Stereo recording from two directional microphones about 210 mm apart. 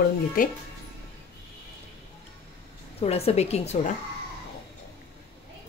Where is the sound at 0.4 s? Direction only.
40° left (ahead or behind).